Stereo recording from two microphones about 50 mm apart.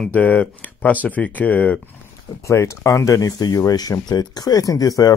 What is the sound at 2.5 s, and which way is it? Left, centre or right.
Speech, left.